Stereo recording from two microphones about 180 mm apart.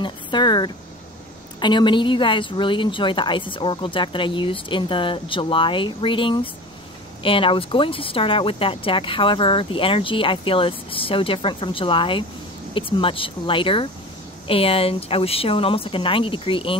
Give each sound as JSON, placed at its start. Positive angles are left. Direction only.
{"t": 0.0, "sound": "speech", "side_deg": 25}